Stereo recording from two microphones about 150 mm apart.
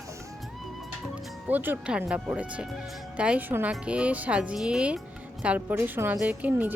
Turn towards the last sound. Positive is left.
turn(degrees=-10)  # may be behind; listen again after turning